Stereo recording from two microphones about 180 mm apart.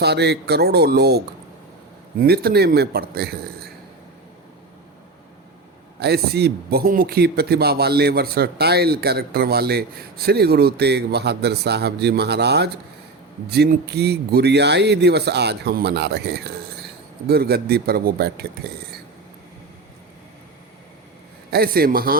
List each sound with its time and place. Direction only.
0.0 s speech: 65° right (ahead or behind)
6.0 s speech: 65° right (ahead or behind)
21.5 s speech: 60° right (ahead or behind)